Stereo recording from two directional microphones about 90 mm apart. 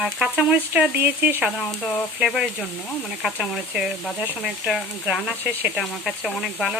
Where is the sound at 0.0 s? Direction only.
5° right (ahead or behind).